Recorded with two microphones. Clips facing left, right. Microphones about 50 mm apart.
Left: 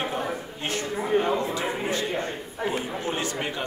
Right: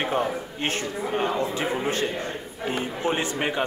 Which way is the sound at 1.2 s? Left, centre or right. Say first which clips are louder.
Even; right.